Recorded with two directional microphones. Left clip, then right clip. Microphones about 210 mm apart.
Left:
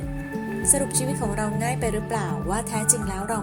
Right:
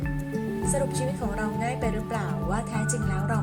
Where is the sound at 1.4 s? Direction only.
30° left (ahead or behind).